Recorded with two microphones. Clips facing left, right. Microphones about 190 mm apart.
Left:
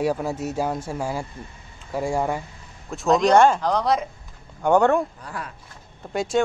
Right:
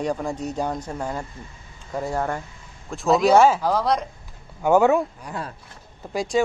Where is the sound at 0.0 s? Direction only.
5° left (ahead or behind).